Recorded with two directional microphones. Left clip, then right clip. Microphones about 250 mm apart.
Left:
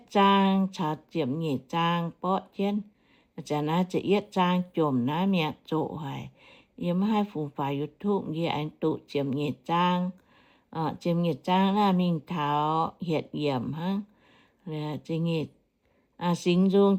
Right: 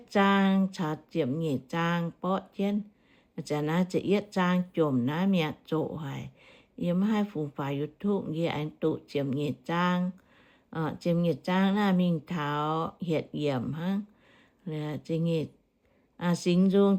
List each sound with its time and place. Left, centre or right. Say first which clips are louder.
0.1 s speech: left 3 dB; centre
11.0 s speech: right 3 dB; centre